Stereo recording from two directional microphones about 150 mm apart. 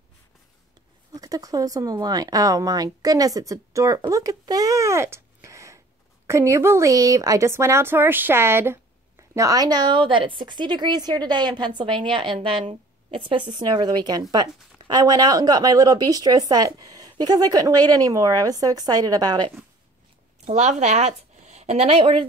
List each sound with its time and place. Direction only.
1.1 s a woman's voice: 25° right (ahead or behind)
20.4 s a woman's voice: 50° right (ahead or behind)